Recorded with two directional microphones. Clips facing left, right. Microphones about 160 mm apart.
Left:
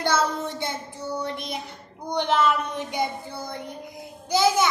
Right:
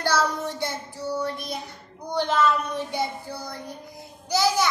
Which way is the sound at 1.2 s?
20° left (ahead or behind).